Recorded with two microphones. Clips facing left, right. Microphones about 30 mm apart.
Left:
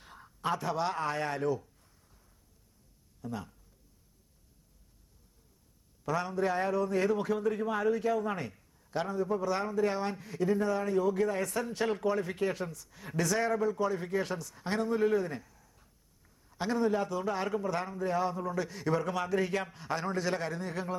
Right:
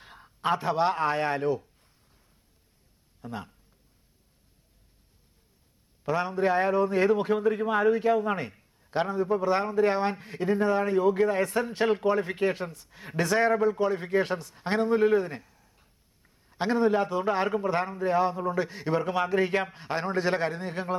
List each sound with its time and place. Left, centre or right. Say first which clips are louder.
0.0 s a sound: right 2 dB; right
0.4 s a man's voice: right 6 dB; right
3.2 s speech: right 2 dB; right
6.1 s a man's voice: right 5 dB; right